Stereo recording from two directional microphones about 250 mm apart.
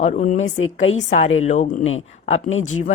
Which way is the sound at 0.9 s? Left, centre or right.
Left.